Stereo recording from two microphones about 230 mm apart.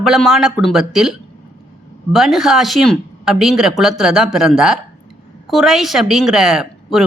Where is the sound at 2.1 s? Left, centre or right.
Centre.